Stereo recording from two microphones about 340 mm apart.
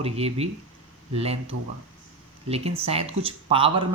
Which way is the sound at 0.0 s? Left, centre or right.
Centre.